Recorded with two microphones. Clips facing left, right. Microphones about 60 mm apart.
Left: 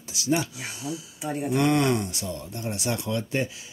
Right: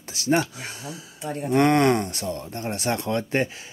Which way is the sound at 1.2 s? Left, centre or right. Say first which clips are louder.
Even; centre.